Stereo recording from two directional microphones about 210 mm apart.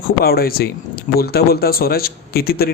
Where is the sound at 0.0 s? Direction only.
45° left (ahead or behind).